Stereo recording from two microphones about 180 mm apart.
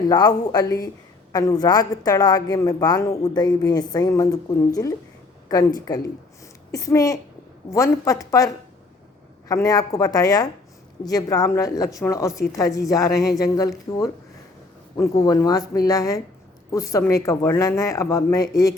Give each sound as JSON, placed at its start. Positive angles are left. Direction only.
{"t": 0.1, "sound": "a woman's voice", "side_deg": 20}